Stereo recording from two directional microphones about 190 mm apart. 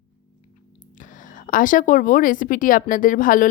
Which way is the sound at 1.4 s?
45° left (ahead or behind).